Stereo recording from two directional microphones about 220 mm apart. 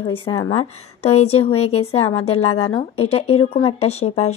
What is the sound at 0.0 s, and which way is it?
Speech, 25° left (ahead or behind).